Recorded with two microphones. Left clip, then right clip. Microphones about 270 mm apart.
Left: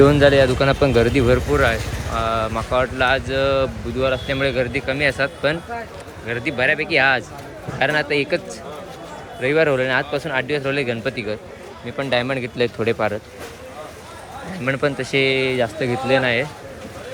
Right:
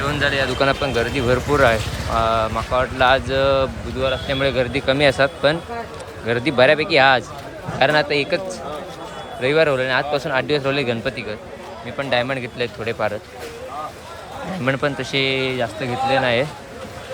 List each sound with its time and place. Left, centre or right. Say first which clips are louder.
0.0 s speech: left 7 dB; centre
14.6 s speech: even; centre